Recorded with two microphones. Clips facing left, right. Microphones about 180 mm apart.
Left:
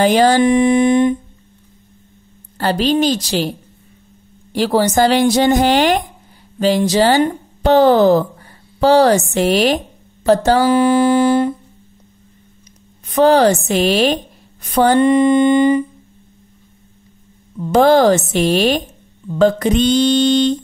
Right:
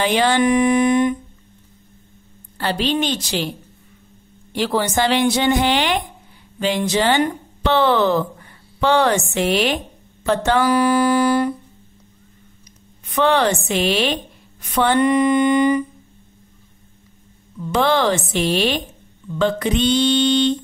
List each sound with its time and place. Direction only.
0.0 s a woman's voice: 40° left (ahead or behind)
0.4 s mantra: 30° left (ahead or behind)
2.5 s a woman's voice: 40° left (ahead or behind)
10.8 s music: 25° left (ahead or behind)
13.1 s a woman's voice: 40° left (ahead or behind)
15.0 s mantra: 25° left (ahead or behind)
17.6 s mantra: 45° left (ahead or behind)